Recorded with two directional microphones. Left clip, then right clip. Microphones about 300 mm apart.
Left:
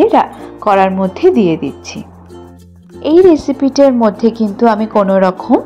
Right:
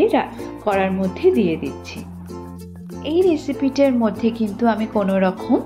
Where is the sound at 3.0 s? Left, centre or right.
Left.